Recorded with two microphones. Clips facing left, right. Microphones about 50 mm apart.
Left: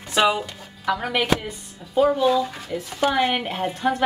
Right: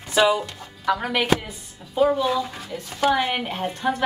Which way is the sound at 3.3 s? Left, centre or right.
Centre.